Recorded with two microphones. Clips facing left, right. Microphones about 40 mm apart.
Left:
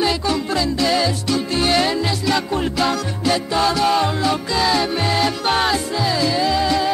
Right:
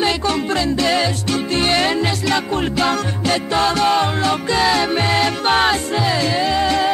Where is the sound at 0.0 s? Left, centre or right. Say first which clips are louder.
Right 1 dB; right.